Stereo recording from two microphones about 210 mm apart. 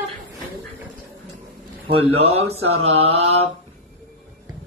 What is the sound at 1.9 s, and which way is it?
Speech, 25° right (ahead or behind).